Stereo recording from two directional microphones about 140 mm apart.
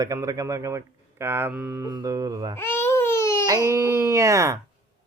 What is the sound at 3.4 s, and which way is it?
A man's voice, 25° right (ahead or behind).